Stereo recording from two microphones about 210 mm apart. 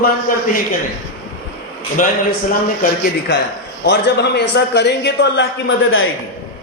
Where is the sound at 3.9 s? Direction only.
55° left (ahead or behind).